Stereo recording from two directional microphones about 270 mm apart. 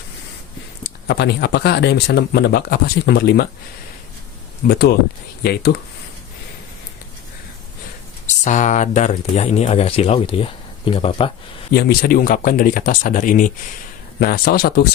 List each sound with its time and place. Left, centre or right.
1.0 s speech: left
4.7 s speech: left
8.4 s speech: left
11.7 s speech: left